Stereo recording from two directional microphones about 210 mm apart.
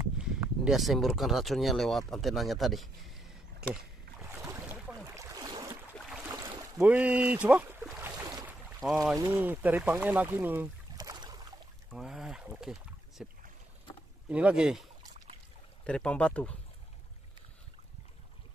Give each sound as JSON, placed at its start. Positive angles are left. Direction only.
{"t": 0.2, "sound": "speech", "side_deg": -5}
{"t": 3.7, "sound": "boat", "side_deg": -10}
{"t": 5.9, "sound": "boat", "side_deg": -5}
{"t": 6.2, "sound": "boat", "side_deg": -20}
{"t": 6.8, "sound": "boat", "side_deg": -5}
{"t": 9.1, "sound": "speech", "side_deg": -15}
{"t": 11.9, "sound": "boat", "side_deg": 0}
{"t": 13.2, "sound": "speech", "side_deg": 0}